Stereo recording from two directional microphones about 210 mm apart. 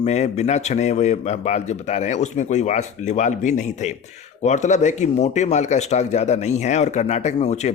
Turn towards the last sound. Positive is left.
turn(degrees=30)  # may be behind; listen again after turning